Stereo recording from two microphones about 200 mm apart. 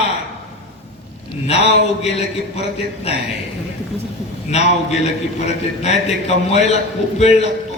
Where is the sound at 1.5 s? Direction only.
30° left (ahead or behind).